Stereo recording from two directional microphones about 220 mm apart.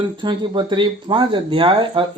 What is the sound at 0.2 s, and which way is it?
Speech, 20° right (ahead or behind).